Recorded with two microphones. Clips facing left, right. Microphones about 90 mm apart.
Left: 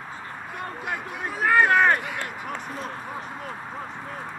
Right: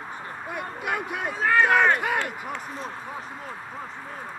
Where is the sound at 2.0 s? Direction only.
60° right (ahead or behind).